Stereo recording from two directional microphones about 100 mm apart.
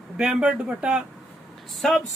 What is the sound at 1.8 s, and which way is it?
Speech, centre (ahead or behind).